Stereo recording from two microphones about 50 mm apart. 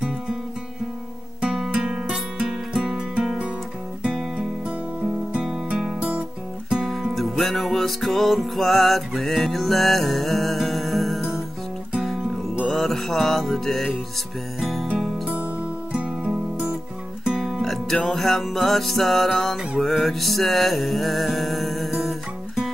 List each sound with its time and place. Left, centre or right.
1.4 s music: centre
7.2 s music: centre
12.7 s music: centre
15.2 s music: right
17.2 s music: centre
17.6 s music: centre